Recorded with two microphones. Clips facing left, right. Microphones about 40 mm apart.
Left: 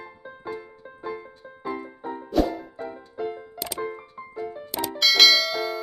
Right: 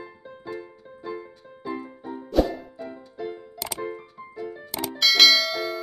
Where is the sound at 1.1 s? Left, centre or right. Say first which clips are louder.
Even; centre.